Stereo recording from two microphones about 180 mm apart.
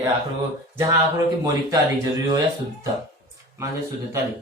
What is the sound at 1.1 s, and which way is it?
Speech, 20° right (ahead or behind).